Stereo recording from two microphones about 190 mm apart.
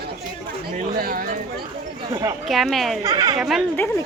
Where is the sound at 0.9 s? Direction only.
50° right (ahead or behind).